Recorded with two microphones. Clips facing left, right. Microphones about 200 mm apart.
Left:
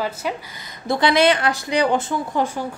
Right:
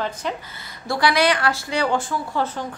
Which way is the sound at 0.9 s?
20° left (ahead or behind).